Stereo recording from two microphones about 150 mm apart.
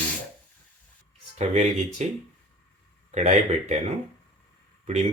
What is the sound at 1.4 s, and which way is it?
Speech, 45° right (ahead or behind).